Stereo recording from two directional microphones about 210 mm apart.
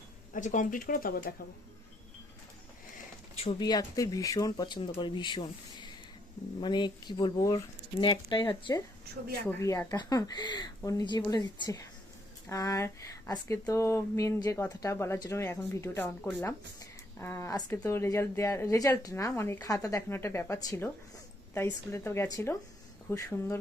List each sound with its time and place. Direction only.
0.3 s speech: 35° left (ahead or behind)
3.3 s speech: 25° left (ahead or behind)